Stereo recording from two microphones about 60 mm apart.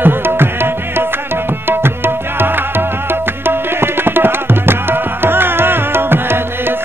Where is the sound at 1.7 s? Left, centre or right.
Right.